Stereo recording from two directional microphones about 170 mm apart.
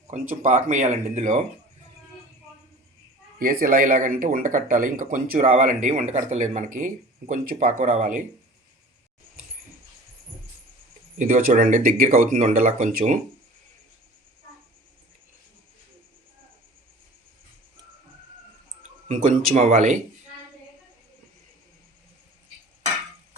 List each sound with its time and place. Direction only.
0.1 s speech: 50° right (ahead or behind)
3.3 s speech: 55° right (ahead or behind)
11.2 s speech: 50° right (ahead or behind)
18.8 s speech: 45° right (ahead or behind)